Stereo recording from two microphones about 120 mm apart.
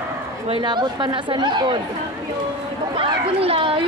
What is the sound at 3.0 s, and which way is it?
Speech, 50° right (ahead or behind).